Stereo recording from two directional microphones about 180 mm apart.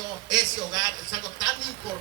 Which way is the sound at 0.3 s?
25° right (ahead or behind).